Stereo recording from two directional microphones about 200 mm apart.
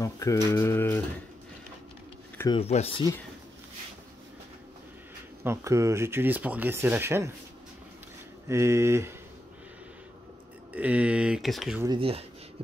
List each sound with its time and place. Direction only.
0.0 s a sound: 15° left (ahead or behind)
0.5 s speech: 15° left (ahead or behind)
2.3 s a sound: 20° left (ahead or behind)
2.6 s speech: 30° left (ahead or behind)
5.4 s speech: 15° right (ahead or behind)
8.5 s speech: 15° right (ahead or behind)
10.7 s speech: 5° right (ahead or behind)
11.8 s speech: 25° right (ahead or behind)